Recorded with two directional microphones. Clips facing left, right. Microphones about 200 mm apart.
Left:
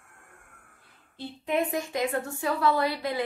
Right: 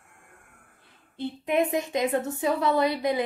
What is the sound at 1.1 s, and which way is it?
A woman's voice, 20° right (ahead or behind).